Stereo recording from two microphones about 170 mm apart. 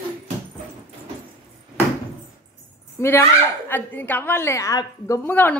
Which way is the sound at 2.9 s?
15° left (ahead or behind).